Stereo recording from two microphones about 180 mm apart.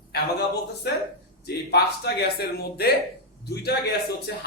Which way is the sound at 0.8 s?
65° left (ahead or behind).